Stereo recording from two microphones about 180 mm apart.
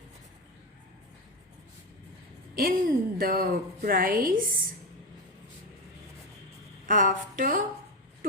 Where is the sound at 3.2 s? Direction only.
55° right (ahead or behind).